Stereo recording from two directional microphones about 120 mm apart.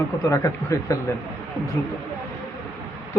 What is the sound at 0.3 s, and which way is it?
Speech, 25° left (ahead or behind).